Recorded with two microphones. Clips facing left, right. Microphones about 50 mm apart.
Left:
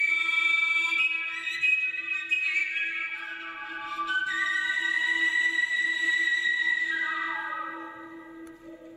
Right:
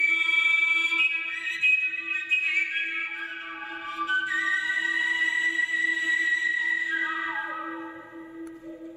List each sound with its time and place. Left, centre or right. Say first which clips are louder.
0.0 s music: right 2 dB; right